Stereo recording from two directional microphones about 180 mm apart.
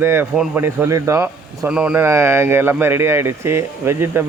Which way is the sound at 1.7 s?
5° right (ahead or behind).